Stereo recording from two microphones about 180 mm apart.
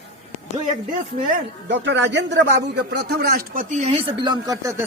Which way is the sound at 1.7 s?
85° right.